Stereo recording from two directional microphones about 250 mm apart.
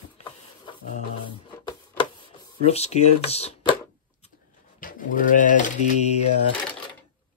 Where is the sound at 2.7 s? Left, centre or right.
Left.